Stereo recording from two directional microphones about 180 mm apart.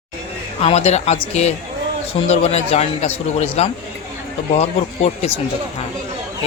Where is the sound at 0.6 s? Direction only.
35° left (ahead or behind).